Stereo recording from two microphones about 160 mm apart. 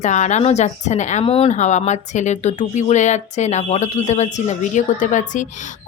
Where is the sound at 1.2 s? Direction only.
35° left (ahead or behind).